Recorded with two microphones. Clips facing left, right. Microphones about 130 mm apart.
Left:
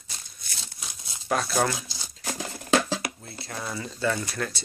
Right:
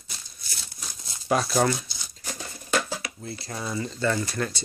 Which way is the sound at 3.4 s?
Centre (ahead or behind).